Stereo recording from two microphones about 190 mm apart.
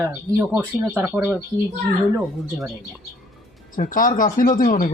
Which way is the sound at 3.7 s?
45° left (ahead or behind).